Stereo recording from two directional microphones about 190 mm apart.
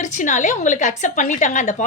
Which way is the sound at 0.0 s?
40° left (ahead or behind).